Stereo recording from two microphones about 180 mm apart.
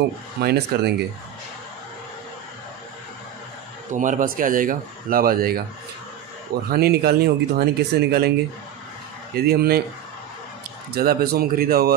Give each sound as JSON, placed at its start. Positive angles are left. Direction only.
{"t": 0.4, "sound": "speech", "side_deg": -60}
{"t": 3.9, "sound": "speech", "side_deg": -45}
{"t": 6.7, "sound": "speech", "side_deg": -60}
{"t": 9.3, "sound": "speech", "side_deg": -60}
{"t": 10.9, "sound": "speech", "side_deg": -55}